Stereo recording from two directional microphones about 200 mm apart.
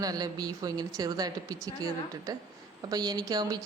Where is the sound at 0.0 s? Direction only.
20° right (ahead or behind).